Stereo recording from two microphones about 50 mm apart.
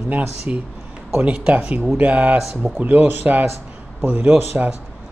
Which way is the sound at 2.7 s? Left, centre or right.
Right.